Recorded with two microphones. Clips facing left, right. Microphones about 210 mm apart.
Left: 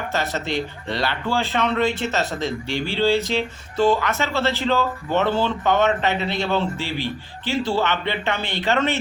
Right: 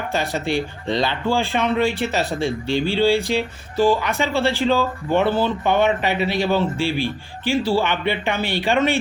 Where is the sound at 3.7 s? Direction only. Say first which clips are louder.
Right 1 dB; 10° right (ahead or behind).